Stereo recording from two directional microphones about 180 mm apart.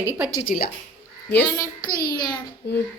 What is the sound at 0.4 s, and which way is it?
Speech, 55° left (ahead or behind).